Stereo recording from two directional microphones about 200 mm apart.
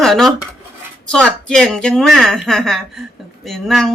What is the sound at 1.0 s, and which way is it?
Speech, 5° left (ahead or behind).